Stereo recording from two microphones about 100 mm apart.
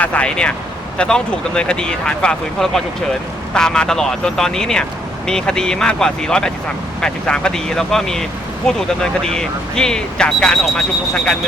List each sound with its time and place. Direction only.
0.0 s speech: 10° left (ahead or behind)